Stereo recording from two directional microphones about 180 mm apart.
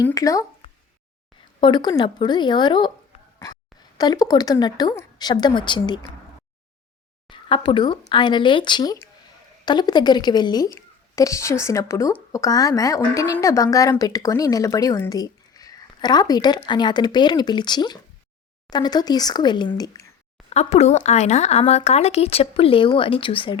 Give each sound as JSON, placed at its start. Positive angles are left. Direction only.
{"t": 0.1, "sound": "a woman's voice", "side_deg": 20}
{"t": 1.6, "sound": "a woman's voice", "side_deg": 25}
{"t": 7.3, "sound": "a woman's voice", "side_deg": 30}
{"t": 20.5, "sound": "speech", "side_deg": 35}